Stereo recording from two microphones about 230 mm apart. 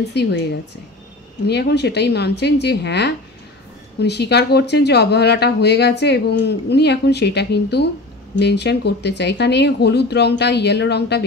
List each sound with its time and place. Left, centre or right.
0.1 s speech: left
1.5 s speech: left